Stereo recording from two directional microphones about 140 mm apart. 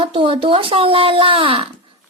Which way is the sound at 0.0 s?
40° right (ahead or behind).